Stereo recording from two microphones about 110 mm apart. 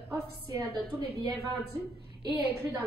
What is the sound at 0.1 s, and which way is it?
A woman's voice, 30° right (ahead or behind).